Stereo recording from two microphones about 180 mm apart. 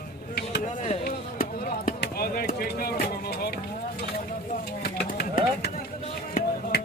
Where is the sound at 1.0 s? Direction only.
50° left (ahead or behind).